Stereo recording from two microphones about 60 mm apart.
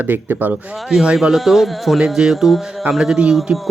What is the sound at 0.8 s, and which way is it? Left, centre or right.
A man's voice, centre.